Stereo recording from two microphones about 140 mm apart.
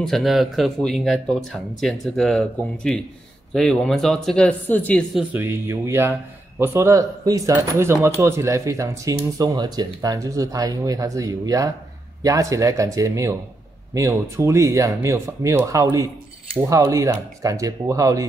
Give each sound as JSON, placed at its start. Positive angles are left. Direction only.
{"t": 0.0, "sound": "speech", "side_deg": 0}
{"t": 5.3, "sound": "speech", "side_deg": -20}